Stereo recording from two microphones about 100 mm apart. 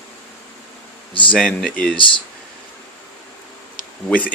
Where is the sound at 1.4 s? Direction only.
5° left (ahead or behind).